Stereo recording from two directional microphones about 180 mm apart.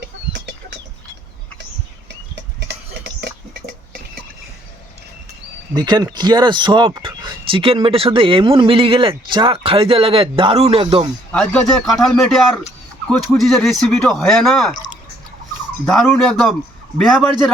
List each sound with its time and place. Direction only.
2.3 s a sound: 70° right (ahead or behind)
5.7 s speech: 20° right (ahead or behind)
11.3 s speech: 5° left (ahead or behind)
15.9 s speech: 5° left (ahead or behind)